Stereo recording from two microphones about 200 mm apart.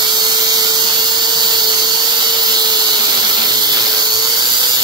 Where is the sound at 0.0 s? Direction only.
20° right (ahead or behind).